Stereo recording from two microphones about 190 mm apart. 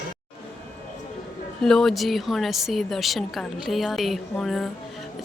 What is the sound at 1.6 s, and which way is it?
A woman's voice, centre (ahead or behind).